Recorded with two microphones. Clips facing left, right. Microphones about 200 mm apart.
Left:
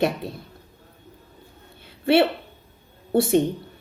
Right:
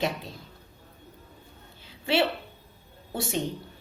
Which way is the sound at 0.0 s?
60° left (ahead or behind).